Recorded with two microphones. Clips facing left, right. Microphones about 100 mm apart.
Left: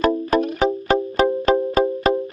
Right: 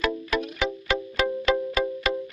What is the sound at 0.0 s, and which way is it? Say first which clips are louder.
Music: left 8 dB; 40° left (ahead or behind).